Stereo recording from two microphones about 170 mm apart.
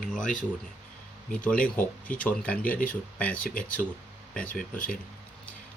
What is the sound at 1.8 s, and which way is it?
Speech, 10° left (ahead or behind).